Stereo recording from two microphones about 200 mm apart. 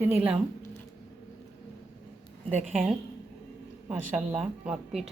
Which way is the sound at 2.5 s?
40° right (ahead or behind).